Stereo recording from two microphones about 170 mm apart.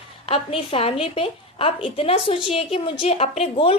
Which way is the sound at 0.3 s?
35° left (ahead or behind).